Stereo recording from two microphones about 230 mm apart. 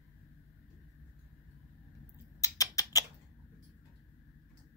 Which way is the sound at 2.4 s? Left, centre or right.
Centre.